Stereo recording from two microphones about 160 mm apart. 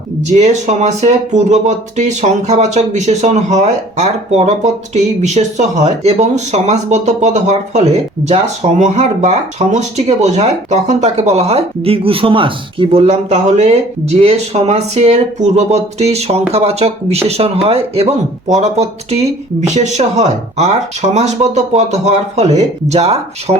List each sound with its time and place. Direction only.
0.3 s speech: 45° right (ahead or behind)